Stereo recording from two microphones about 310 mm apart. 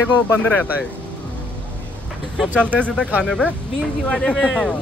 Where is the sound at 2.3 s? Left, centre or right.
Centre.